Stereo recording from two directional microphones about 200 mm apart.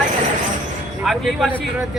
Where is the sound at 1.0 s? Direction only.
Centre (ahead or behind).